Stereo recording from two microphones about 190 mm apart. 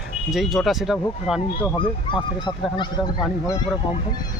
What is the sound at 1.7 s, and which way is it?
Speech, 25° left (ahead or behind).